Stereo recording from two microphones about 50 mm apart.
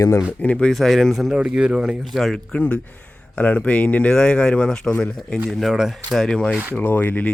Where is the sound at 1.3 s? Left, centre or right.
Right.